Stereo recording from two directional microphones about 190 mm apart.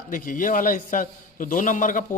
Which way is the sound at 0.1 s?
45° left (ahead or behind).